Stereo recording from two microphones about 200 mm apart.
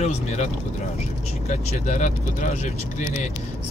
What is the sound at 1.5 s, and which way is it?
Speech, 35° left (ahead or behind).